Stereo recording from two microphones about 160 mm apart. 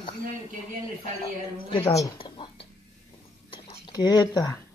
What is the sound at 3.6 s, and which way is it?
Speech, 25° left (ahead or behind).